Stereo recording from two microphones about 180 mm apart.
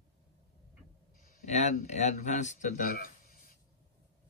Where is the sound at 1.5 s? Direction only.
40° left (ahead or behind).